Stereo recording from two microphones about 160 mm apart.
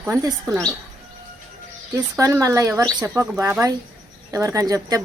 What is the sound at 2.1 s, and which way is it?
Speech, 20° right (ahead or behind).